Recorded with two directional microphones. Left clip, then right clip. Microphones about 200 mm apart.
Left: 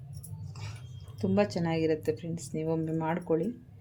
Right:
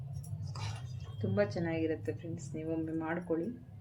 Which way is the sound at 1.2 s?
45° left (ahead or behind).